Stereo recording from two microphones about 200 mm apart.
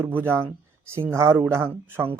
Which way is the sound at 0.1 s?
10° right (ahead or behind).